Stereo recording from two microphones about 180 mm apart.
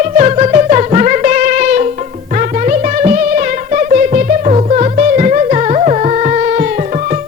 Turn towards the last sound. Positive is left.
turn(degrees=-40)  # may be behind; listen again after turning